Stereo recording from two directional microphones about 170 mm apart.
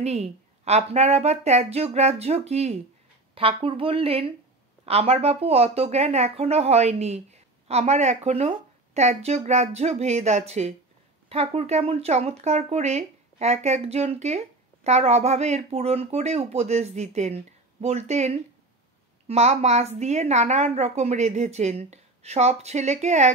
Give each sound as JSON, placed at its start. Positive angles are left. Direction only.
{"t": 0.0, "sound": "speech", "side_deg": -40}